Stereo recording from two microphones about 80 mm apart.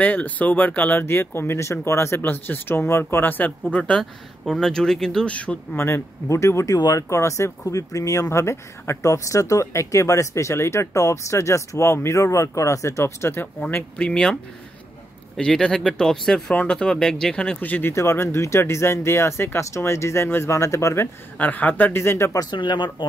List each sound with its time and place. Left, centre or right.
0.0 s speech: left
4.0 s speech: centre
5.8 s speech: left
13.9 s speech: centre
17.6 s speech: left
17.9 s speech: left
21.4 s speech: left
22.4 s speech: left